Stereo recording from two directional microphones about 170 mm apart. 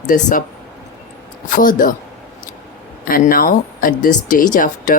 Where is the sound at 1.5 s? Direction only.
50° left (ahead or behind).